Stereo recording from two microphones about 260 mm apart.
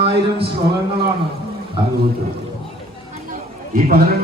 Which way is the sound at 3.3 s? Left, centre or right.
Right.